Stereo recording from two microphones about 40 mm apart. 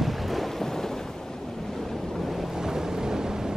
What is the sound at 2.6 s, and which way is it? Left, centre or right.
Vehicle, centre.